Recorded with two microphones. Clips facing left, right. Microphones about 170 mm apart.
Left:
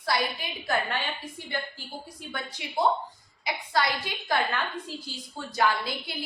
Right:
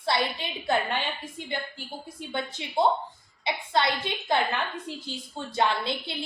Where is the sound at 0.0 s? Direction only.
25° right (ahead or behind).